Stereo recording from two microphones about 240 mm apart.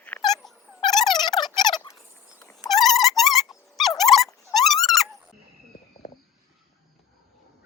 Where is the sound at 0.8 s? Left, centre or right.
Centre.